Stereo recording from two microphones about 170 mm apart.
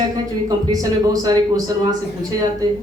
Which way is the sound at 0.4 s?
20° right (ahead or behind).